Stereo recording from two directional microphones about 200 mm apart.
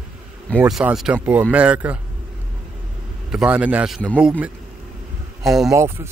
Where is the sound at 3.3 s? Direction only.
5° right (ahead or behind).